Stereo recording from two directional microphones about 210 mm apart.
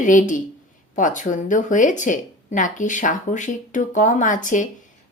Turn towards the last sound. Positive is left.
turn(degrees=35)  # may be behind; listen again after turning